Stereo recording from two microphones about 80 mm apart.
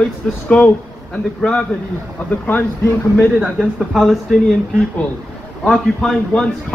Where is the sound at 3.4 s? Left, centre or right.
Centre.